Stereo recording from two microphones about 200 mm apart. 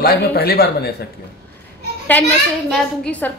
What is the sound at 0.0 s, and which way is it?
Speech, 50° left (ahead or behind).